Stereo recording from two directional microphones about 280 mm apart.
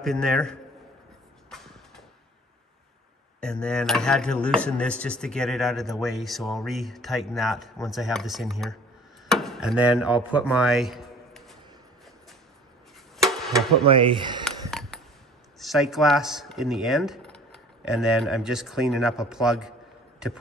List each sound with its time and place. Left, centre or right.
0.0 s speech: centre
1.5 s vehicle: centre
3.3 s speech: centre
13.8 s speech: centre
14.4 s a sound: centre
15.6 s speech: centre